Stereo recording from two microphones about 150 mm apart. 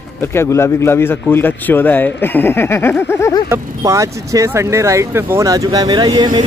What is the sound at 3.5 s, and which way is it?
Speech, 20° right (ahead or behind).